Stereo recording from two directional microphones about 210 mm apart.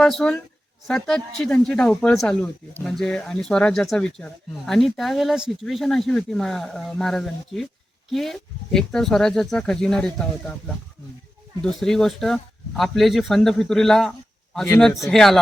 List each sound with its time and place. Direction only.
0.0 s speech: 5° left (ahead or behind)
11.6 s speech: centre (ahead or behind)